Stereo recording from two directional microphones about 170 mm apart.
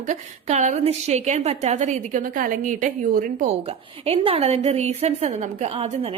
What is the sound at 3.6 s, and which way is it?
A woman's voice, 35° right (ahead or behind).